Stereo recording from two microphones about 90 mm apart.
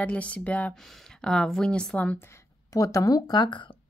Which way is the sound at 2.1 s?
25° left (ahead or behind).